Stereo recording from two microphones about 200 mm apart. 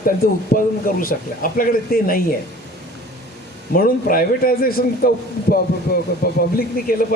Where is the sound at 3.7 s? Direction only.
45° left (ahead or behind).